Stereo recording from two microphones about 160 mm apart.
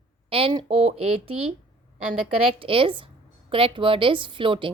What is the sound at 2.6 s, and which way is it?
A woman's voice, 35° right (ahead or behind).